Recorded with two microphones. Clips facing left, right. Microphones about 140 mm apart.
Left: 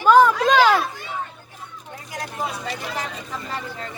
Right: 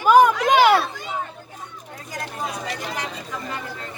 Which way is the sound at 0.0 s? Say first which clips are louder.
Even; 15° right (ahead or behind).